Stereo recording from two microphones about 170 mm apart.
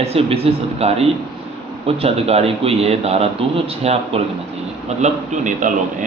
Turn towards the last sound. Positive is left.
turn(degrees=-50)  # may be behind; listen again after turning